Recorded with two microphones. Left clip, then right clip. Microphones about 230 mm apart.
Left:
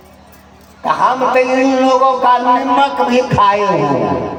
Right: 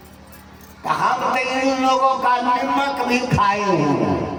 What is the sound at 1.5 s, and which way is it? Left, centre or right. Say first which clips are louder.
A man's voice: left 6 dB; left.